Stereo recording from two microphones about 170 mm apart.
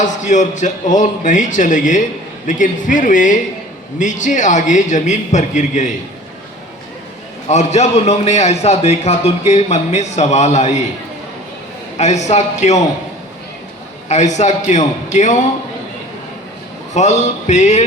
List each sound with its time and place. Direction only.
0.0 s a man's voice: 45° left (ahead or behind)
7.4 s a man's voice: 40° left (ahead or behind)
11.9 s a man's voice: 40° left (ahead or behind)
14.1 s a man's voice: 45° left (ahead or behind)
16.9 s a man's voice: 45° left (ahead or behind)